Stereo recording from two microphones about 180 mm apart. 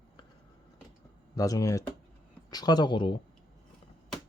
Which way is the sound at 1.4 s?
20° left (ahead or behind).